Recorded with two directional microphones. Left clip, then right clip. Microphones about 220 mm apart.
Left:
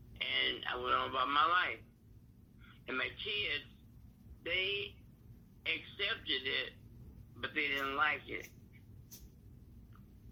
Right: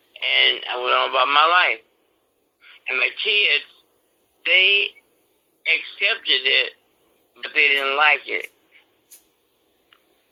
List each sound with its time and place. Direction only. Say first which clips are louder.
0.3 s a man's voice: right 18 dB; 45° right (ahead or behind)